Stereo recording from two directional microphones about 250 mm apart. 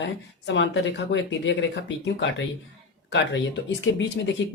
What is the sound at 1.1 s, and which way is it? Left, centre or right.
Speech, left.